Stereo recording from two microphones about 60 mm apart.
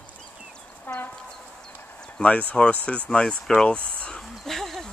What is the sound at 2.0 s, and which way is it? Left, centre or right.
Speech, centre.